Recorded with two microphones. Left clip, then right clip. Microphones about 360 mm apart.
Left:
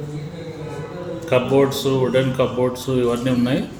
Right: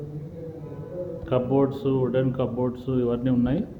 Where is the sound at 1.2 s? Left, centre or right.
Right.